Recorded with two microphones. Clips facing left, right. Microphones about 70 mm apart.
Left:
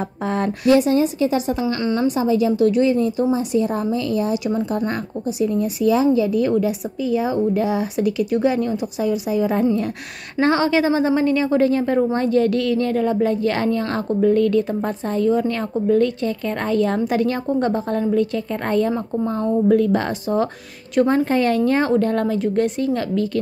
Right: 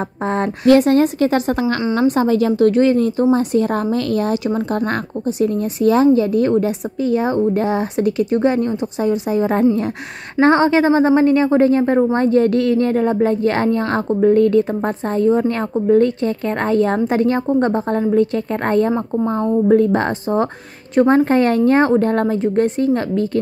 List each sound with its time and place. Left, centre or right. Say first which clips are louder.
0.7 s a woman's voice: right 4 dB; right
1.8 s a woman's voice: right 3 dB; right
2.0 s a woman's voice: right 3 dB; right
21.3 s a woman's voice: right 4 dB; right